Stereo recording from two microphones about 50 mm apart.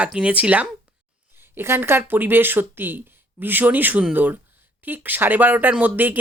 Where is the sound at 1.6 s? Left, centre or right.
Right.